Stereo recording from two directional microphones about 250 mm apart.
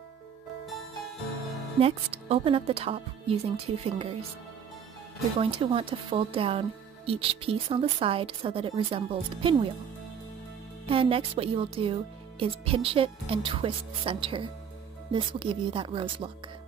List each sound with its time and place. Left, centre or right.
1.8 s speech: right
5.4 s speech: right
10.9 s speech: right